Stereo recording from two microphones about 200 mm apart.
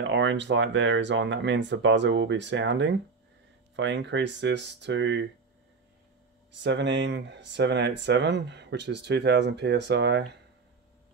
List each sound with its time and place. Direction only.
0.0 s speech: 65° right (ahead or behind)
6.6 s speech: 60° right (ahead or behind)